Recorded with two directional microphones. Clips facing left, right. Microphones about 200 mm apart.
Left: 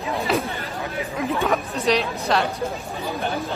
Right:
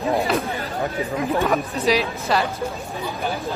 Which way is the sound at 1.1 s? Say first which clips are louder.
Right 1 dB; centre (ahead or behind).